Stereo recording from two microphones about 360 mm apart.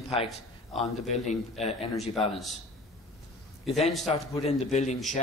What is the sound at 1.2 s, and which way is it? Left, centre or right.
Speech, centre.